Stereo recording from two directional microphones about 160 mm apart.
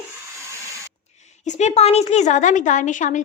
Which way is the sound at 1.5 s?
45° left (ahead or behind).